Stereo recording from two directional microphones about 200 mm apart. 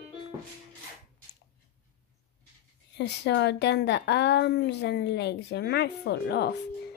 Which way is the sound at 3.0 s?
60° left (ahead or behind).